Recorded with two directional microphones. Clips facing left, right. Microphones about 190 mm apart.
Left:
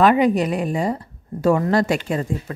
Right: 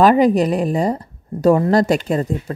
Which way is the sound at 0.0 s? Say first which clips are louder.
Right 3 dB; 40° right (ahead or behind).